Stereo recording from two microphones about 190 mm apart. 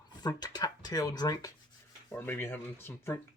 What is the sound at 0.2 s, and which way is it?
Speech, 20° left (ahead or behind).